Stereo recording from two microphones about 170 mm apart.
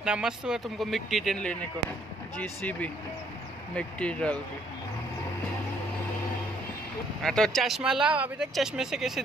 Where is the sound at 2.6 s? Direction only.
10° left (ahead or behind).